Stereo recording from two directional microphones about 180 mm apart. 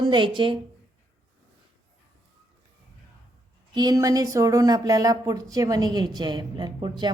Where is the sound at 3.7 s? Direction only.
20° right (ahead or behind).